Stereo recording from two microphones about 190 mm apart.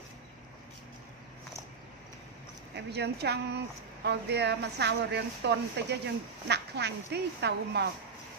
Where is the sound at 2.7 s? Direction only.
60° right (ahead or behind).